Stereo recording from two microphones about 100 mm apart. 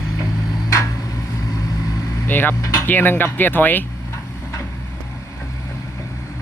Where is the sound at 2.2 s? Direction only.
20° left (ahead or behind).